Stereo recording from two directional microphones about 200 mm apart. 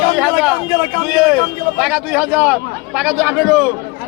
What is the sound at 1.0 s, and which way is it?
A man's voice, 5° right (ahead or behind).